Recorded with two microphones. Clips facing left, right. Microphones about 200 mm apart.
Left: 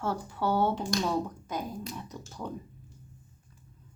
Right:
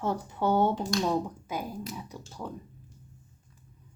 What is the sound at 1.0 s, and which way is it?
Speech, 10° right (ahead or behind).